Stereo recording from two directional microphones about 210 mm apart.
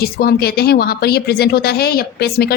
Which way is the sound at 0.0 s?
45° left (ahead or behind).